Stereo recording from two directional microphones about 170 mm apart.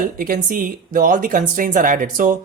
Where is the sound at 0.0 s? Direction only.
55° right (ahead or behind).